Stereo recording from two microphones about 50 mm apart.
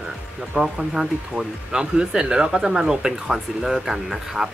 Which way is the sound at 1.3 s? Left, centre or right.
Centre.